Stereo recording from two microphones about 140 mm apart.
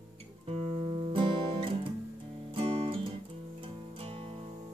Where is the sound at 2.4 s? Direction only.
40° right (ahead or behind).